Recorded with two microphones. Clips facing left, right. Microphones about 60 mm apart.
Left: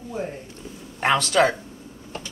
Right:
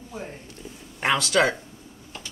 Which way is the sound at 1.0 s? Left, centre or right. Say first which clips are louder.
Left 2 dB; centre.